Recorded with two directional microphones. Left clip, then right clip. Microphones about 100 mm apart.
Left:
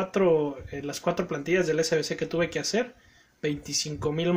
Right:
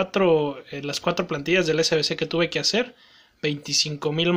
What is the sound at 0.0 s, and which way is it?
Speech, 25° right (ahead or behind).